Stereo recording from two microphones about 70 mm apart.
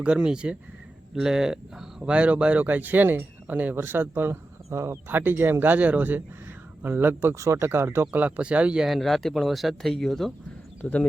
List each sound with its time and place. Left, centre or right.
0.0 s speech: centre; by 7.3 s right
7.3 s speech: right
7.7 s speech: right
8.1 s speech: right
8.9 s speech: centre
10.8 s speech: left